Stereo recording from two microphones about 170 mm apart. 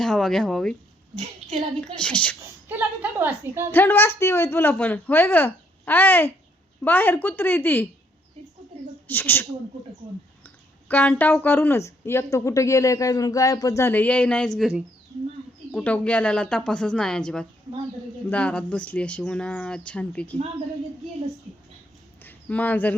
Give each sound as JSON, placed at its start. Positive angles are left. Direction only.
{"t": 0.0, "sound": "speech", "side_deg": 5}
{"t": 1.5, "sound": "speech", "side_deg": -35}
{"t": 2.0, "sound": "a woman's voice", "side_deg": 5}
{"t": 2.6, "sound": "a woman's voice", "side_deg": -10}
{"t": 3.7, "sound": "a woman's voice", "side_deg": 10}
{"t": 9.0, "sound": "a woman's voice", "side_deg": 10}
{"t": 15.7, "sound": "a woman's voice", "side_deg": 5}
{"t": 22.2, "sound": "a sound", "side_deg": 10}